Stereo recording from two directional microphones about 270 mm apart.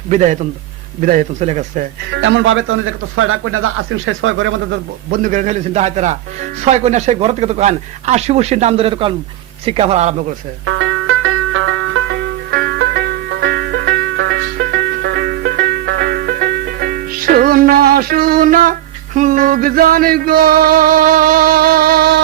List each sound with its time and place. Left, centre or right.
0.1 s speech: right
10.7 s banjo: right
19.1 s music: right